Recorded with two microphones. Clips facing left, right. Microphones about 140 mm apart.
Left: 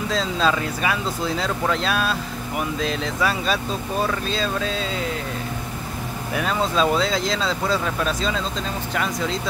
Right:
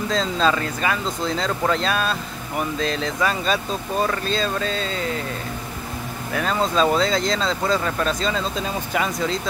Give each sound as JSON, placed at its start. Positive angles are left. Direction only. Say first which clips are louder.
{"t": 0.1, "sound": "speech", "louder": "right 1 dB", "side_deg": 0}
{"t": 6.3, "sound": "speech", "louder": "right 1 dB", "side_deg": 0}